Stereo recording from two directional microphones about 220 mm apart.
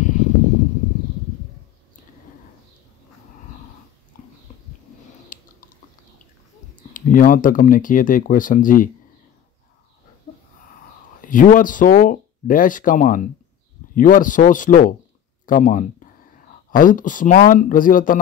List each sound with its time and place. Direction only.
0.0 s a sound: 35° left (ahead or behind)
4.1 s horse: 40° left (ahead or behind)
5.3 s chewing: 40° left (ahead or behind)
6.9 s speech: 40° left (ahead or behind)
11.1 s speech: 40° left (ahead or behind)